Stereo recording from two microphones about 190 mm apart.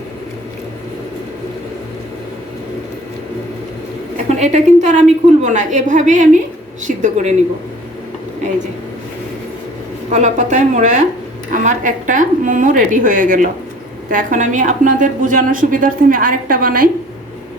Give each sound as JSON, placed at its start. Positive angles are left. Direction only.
{"t": 4.3, "sound": "a woman's voice", "side_deg": -35}
{"t": 10.1, "sound": "a woman's voice", "side_deg": -40}